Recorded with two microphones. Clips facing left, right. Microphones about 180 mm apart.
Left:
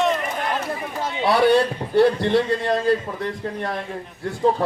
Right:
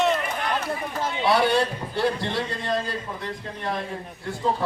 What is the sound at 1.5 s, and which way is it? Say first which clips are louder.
Speech: left 6 dB; 55° left (ahead or behind).